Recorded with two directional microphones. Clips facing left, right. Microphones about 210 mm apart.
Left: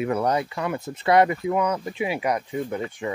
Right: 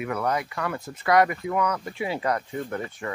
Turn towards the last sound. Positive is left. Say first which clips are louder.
# left 3 dB
turn(degrees=15)  # may be behind; listen again after turning